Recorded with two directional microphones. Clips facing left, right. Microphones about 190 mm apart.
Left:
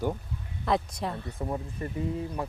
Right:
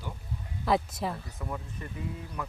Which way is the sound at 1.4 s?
35° left (ahead or behind).